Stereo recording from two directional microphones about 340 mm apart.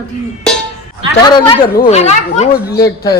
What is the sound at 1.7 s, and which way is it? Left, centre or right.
Speech, left.